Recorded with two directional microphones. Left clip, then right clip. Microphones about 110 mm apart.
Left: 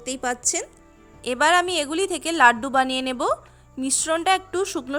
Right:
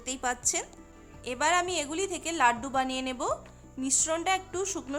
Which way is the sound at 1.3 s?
55° left (ahead or behind).